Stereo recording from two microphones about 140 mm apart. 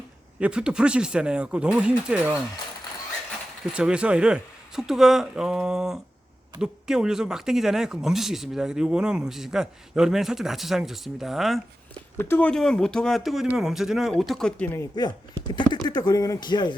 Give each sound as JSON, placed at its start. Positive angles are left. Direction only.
{"t": 0.3, "sound": "speech", "side_deg": -5}
{"t": 3.7, "sound": "speech", "side_deg": -5}
{"t": 12.1, "sound": "speech", "side_deg": 15}
{"t": 15.4, "sound": "speech", "side_deg": 35}